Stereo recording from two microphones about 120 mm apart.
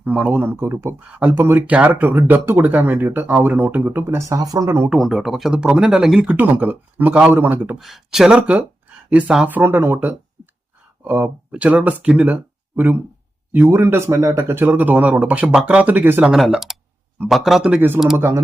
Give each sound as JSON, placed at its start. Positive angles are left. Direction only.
{"t": 0.0, "sound": "speech", "side_deg": -10}
{"t": 4.9, "sound": "speech", "side_deg": -5}
{"t": 7.8, "sound": "speech", "side_deg": 0}
{"t": 16.2, "sound": "speech", "side_deg": -5}